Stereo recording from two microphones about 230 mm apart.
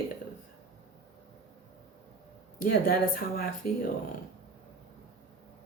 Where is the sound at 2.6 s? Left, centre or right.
Left.